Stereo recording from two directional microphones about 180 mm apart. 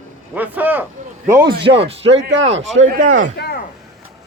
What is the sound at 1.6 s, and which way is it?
Speech, 30° right (ahead or behind).